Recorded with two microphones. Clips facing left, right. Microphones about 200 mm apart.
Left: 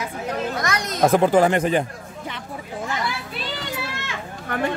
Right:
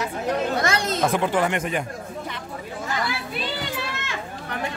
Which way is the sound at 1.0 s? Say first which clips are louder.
Left 8 dB; 40° left (ahead or behind).